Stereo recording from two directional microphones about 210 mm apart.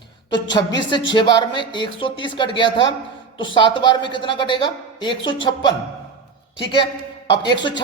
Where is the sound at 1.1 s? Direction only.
25° left (ahead or behind).